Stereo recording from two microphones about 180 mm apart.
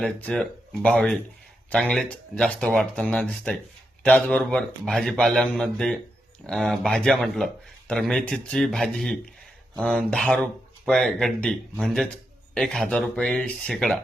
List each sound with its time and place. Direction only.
0.0 s a man's voice: 5° left (ahead or behind)